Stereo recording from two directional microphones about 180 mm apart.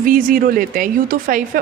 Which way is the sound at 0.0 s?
50° right (ahead or behind).